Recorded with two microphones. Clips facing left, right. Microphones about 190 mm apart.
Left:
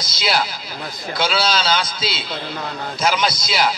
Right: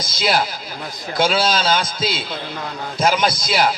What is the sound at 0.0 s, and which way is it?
A man's voice, 50° right (ahead or behind).